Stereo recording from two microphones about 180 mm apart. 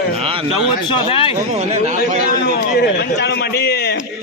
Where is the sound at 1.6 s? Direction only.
40° right (ahead or behind).